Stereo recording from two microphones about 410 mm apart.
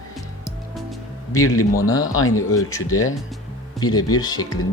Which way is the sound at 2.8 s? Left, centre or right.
Left.